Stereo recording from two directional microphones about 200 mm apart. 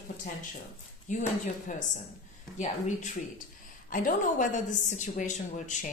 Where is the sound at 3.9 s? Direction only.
40° left (ahead or behind).